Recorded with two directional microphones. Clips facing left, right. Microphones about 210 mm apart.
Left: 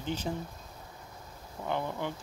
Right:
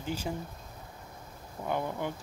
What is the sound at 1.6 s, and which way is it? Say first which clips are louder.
Speech: right 1 dB; 10° right (ahead or behind).